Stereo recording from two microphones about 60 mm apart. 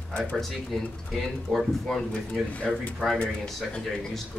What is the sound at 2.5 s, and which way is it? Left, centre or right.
Speech, left.